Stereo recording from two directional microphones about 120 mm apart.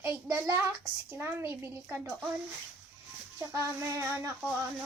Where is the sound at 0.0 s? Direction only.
25° right (ahead or behind).